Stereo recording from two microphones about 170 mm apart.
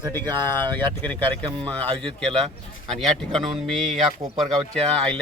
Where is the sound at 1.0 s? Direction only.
10° left (ahead or behind).